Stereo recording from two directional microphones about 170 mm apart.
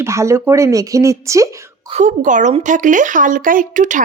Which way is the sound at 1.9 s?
45° right (ahead or behind).